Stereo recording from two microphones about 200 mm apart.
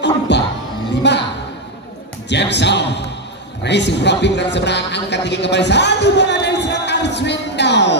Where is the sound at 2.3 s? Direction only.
60° left (ahead or behind).